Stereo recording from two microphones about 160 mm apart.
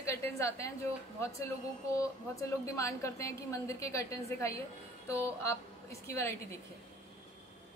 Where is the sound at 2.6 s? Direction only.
20° left (ahead or behind).